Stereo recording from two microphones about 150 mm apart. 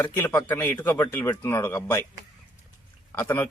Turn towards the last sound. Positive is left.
turn(degrees=15)  # may be behind; listen again after turning